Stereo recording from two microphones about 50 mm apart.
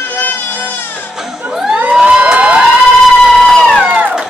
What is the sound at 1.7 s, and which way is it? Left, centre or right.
Crowd, right.